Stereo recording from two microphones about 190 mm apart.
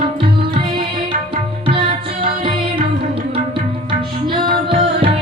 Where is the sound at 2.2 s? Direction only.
25° right (ahead or behind).